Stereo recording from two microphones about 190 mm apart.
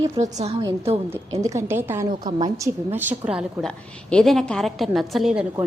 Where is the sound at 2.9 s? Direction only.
10° right (ahead or behind).